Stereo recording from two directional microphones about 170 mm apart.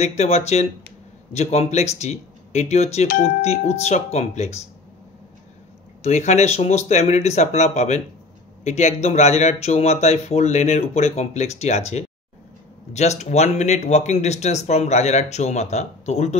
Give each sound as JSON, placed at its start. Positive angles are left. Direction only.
{"t": 0.0, "sound": "speech", "side_deg": 40}
{"t": 6.0, "sound": "speech", "side_deg": 40}